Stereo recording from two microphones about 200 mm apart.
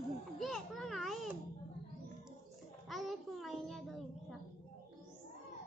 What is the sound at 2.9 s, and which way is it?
Child singing, centre (ahead or behind).